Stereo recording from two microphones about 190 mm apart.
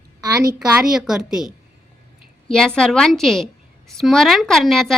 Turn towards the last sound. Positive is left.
turn(degrees=0)  # may be behind; listen again after turning